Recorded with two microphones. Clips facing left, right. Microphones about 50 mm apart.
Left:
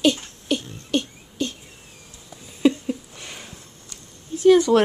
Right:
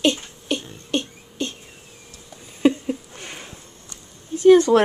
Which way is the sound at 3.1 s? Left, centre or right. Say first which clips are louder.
Right 2 dB; right.